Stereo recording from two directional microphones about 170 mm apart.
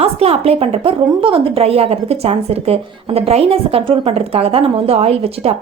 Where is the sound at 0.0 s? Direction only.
35° right (ahead or behind).